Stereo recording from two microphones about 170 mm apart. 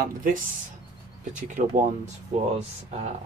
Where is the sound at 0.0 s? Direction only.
55° right (ahead or behind).